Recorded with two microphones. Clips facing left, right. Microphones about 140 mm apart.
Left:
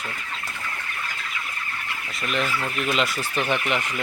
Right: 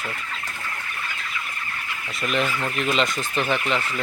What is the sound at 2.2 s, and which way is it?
Speech, centre (ahead or behind).